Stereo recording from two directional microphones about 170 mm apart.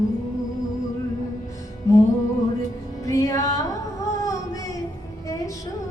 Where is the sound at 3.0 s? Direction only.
20° left (ahead or behind).